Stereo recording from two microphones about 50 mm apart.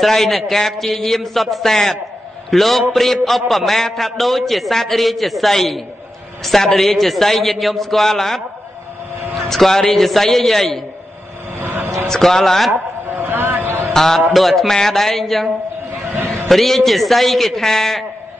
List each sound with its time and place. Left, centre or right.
0.0 s a man's voice: centre
9.5 s a man's voice: centre
11.6 s a sound: right
12.1 s speech: centre
13.2 s a sound: right
13.7 s mantra: right
13.9 s a man's voice: centre